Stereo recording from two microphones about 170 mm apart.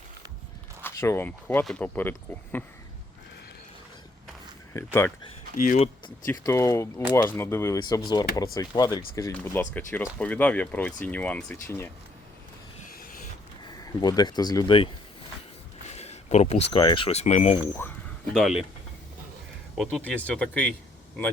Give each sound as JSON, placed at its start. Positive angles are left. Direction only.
{"t": 0.8, "sound": "speech", "side_deg": 15}
{"t": 4.7, "sound": "speech", "side_deg": 15}
{"t": 5.5, "sound": "speech", "side_deg": 50}
{"t": 6.4, "sound": "speech", "side_deg": 20}
{"t": 9.3, "sound": "speech", "side_deg": 10}
{"t": 12.9, "sound": "creak", "side_deg": 55}
{"t": 13.7, "sound": "speech", "side_deg": 25}
{"t": 15.9, "sound": "a sound", "side_deg": 40}
{"t": 16.8, "sound": "speech", "side_deg": 30}
{"t": 17.8, "sound": "speech", "side_deg": 10}
{"t": 18.3, "sound": "speech", "side_deg": 0}
{"t": 19.7, "sound": "speech", "side_deg": 5}